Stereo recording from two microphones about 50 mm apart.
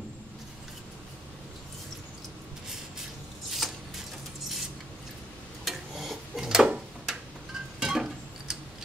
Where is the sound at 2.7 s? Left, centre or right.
Centre.